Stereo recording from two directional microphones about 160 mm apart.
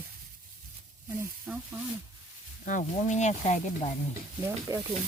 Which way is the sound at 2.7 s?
50° left (ahead or behind).